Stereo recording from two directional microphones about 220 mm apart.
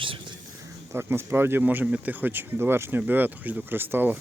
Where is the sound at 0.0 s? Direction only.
25° right (ahead or behind).